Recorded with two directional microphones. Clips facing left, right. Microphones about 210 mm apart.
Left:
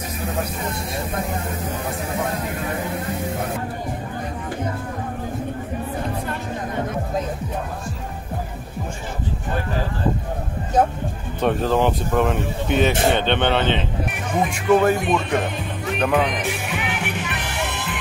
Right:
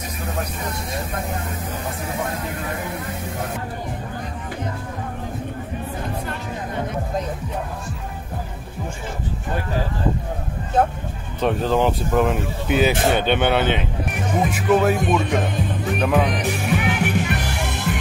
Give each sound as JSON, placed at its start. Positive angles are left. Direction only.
{"t": 11.4, "sound": "speech", "side_deg": 0}
{"t": 16.7, "sound": "music", "side_deg": -45}